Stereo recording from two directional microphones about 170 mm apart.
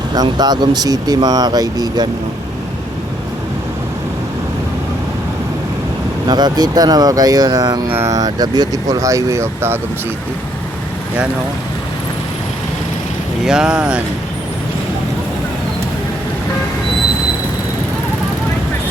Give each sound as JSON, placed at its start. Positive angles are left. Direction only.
{"t": 0.1, "sound": "speech", "side_deg": -25}
{"t": 6.2, "sound": "speech", "side_deg": -25}
{"t": 13.4, "sound": "speech", "side_deg": -5}